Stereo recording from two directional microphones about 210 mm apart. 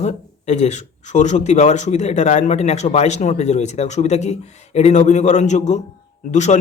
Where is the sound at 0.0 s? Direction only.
35° left (ahead or behind).